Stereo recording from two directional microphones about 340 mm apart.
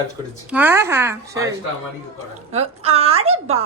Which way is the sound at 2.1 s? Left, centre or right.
Centre.